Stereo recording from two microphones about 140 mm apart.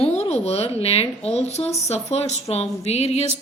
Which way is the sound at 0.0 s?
50° left (ahead or behind).